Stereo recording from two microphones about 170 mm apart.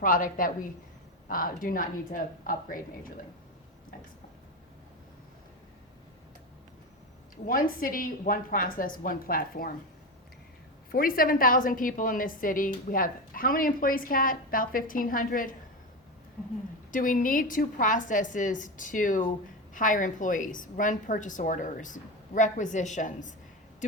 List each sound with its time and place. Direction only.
0.0 s a woman's voice: 55° left (ahead or behind)
7.4 s a woman's voice: 55° left (ahead or behind)
10.9 s a woman's voice: 55° left (ahead or behind)
16.9 s a woman's voice: 50° left (ahead or behind)